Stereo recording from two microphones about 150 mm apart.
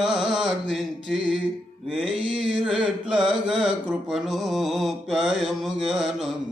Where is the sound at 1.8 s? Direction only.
5° right (ahead or behind).